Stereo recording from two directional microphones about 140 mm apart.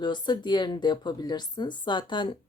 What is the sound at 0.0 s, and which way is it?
Speech, 35° left (ahead or behind).